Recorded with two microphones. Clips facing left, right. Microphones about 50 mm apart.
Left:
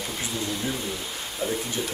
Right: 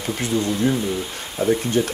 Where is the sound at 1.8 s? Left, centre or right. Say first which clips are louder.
Right 10 dB; right.